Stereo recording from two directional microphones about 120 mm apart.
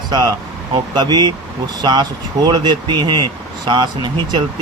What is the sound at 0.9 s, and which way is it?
Speech, 35° right (ahead or behind).